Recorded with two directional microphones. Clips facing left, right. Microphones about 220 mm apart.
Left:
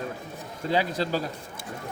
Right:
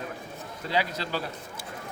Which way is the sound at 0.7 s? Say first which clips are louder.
Left 4 dB; 45° left (ahead or behind).